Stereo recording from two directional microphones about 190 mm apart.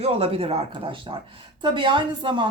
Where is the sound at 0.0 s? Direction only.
30° right (ahead or behind).